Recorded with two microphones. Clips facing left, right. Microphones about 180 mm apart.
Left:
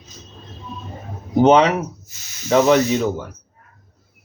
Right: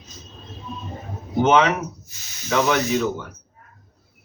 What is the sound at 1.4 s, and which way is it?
Speech, 35° left (ahead or behind).